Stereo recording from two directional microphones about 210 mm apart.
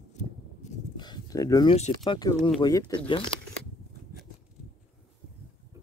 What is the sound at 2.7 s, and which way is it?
Speech, 15° left (ahead or behind).